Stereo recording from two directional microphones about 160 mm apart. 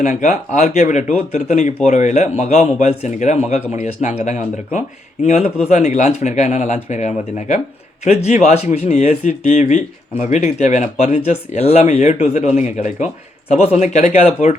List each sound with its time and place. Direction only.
0.0 s speech: 45° left (ahead or behind)